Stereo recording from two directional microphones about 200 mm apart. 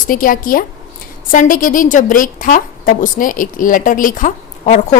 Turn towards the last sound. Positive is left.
turn(degrees=40)  # may be behind; listen again after turning